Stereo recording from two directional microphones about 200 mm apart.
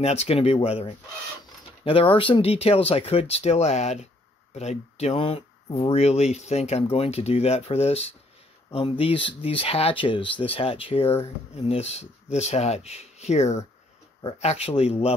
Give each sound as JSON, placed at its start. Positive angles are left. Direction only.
{"t": 0.0, "sound": "speech", "side_deg": 30}
{"t": 2.1, "sound": "speech", "side_deg": 25}